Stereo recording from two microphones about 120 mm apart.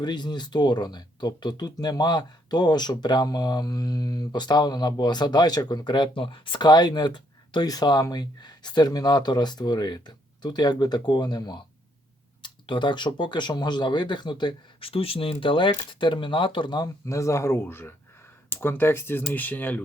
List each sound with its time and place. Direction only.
0.0 s speech: 35° left (ahead or behind); by 19.8 s 15° left (ahead or behind)